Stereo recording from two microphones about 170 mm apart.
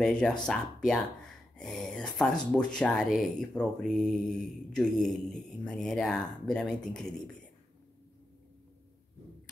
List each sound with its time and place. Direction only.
0.0 s speech: 5° left (ahead or behind)